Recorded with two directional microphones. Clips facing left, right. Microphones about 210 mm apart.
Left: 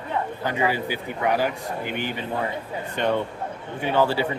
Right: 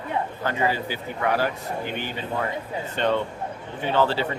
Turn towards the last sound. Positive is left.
turn(degrees=10)  # may be behind; listen again after turning